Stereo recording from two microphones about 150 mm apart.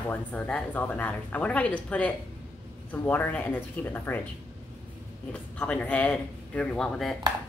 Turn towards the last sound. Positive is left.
turn(degrees=0)  # may be behind; listen again after turning